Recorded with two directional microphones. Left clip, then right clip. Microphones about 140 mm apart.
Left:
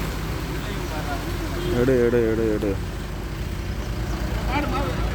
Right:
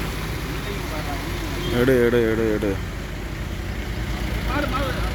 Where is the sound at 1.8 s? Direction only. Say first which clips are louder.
Right 2 dB; 5° right (ahead or behind).